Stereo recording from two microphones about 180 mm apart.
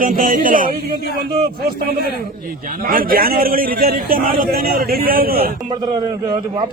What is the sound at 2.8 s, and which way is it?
A man's voice, 55° right (ahead or behind).